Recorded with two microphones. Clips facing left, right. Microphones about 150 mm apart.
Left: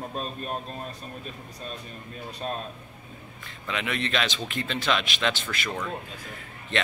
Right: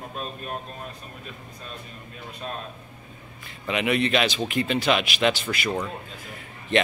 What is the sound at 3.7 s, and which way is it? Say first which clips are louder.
A man's voice: right 7 dB; 15° right (ahead or behind).